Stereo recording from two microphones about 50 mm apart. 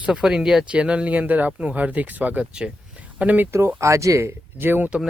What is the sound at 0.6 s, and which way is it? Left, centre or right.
Speech, right.